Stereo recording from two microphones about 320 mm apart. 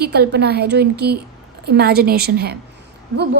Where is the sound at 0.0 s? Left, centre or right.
Right.